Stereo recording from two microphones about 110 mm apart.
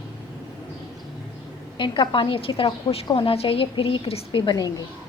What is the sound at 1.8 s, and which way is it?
A woman's voice, 45° left (ahead or behind).